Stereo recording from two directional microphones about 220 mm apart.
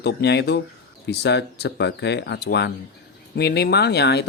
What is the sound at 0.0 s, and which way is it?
Speech, 50° left (ahead or behind).